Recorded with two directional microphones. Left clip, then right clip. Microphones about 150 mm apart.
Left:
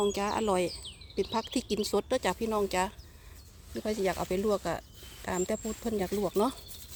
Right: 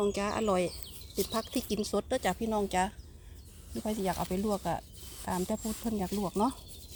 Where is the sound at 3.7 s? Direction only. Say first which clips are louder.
Left 2 dB; 20° left (ahead or behind).